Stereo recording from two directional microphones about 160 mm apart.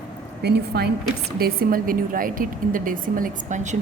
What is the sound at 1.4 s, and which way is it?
A woman's voice, 65° right (ahead or behind).